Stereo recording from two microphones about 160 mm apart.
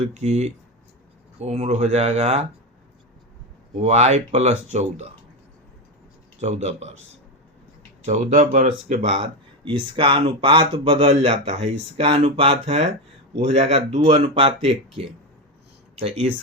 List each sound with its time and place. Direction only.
0.0 s speech: 45° right (ahead or behind)
3.8 s speech: 45° right (ahead or behind)
6.4 s speech: 45° right (ahead or behind)
8.0 s speech: 45° right (ahead or behind)
9.9 s speech: 35° right (ahead or behind)